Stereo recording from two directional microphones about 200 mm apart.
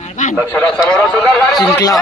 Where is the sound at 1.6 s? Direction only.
15° left (ahead or behind).